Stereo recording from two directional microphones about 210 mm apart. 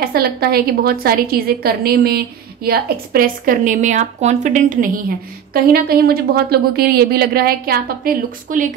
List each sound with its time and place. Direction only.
0.0 s a woman's voice: 45° right (ahead or behind)